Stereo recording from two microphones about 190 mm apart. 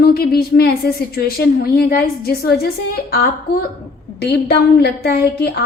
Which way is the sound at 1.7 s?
55° left (ahead or behind).